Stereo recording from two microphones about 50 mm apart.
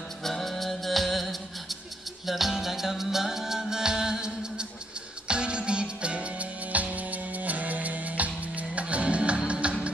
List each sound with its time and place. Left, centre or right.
0.2 s music: centre; by 9.8 s right